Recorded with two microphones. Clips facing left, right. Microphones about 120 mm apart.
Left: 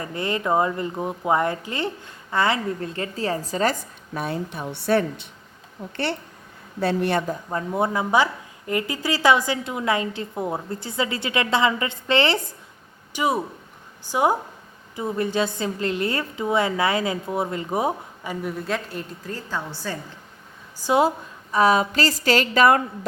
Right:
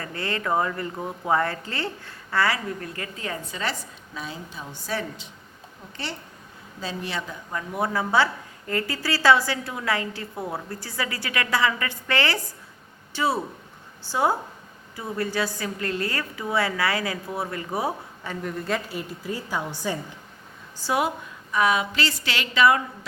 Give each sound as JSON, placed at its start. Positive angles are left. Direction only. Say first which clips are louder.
{"t": 0.0, "sound": "a woman's voice", "louder": "left 4 dB", "side_deg": 20}
{"t": 6.7, "sound": "speech", "louder": "left 10 dB", "side_deg": 60}
{"t": 7.5, "sound": "a woman's voice", "louder": "left 3 dB", "side_deg": 25}
{"t": 20.7, "sound": "a woman's voice", "louder": "left 5 dB", "side_deg": 15}
{"t": 21.5, "sound": "a woman's voice", "louder": "left 4 dB", "side_deg": 35}